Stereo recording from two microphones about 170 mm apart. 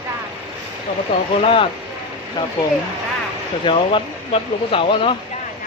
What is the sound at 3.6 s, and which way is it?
Speech, 30° left (ahead or behind).